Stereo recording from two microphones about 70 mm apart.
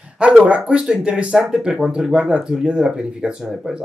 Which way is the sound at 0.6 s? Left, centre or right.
Centre.